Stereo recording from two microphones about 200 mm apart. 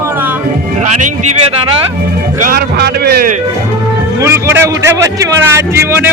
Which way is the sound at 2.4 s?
50° right (ahead or behind).